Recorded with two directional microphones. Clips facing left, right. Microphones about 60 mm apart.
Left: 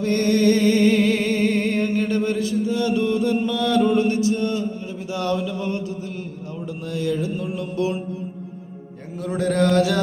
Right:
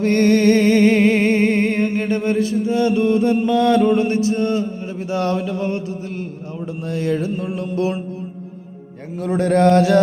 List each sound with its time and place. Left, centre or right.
0.0 s music: right
6.7 s mantra: right
9.1 s mantra: right